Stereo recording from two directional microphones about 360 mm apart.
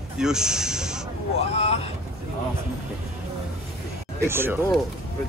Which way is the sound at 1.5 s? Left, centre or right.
Centre.